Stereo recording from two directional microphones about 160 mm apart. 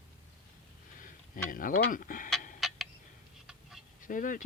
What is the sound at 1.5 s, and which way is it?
Speech, 60° left (ahead or behind).